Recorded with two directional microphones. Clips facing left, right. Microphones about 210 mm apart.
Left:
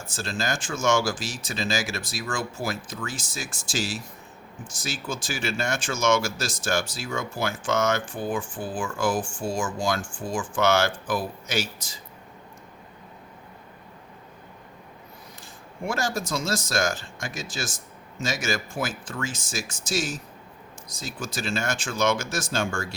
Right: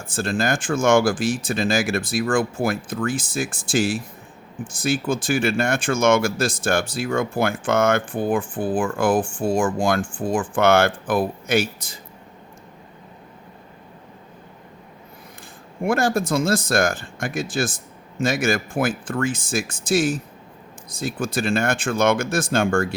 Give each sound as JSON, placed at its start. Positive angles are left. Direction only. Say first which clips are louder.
{"t": 0.0, "sound": "speech", "louder": "right 7 dB", "side_deg": -55}
{"t": 15.8, "sound": "speech", "louder": "right 8 dB", "side_deg": -55}